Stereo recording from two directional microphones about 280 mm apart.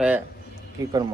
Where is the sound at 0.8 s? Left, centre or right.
Centre.